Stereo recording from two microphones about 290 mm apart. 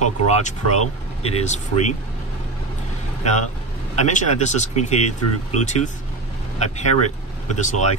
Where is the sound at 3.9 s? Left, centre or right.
Left.